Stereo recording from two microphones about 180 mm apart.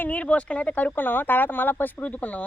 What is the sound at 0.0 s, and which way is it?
Speech, 10° left (ahead or behind).